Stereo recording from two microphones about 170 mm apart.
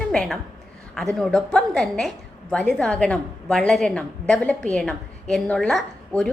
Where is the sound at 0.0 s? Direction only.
5° left (ahead or behind).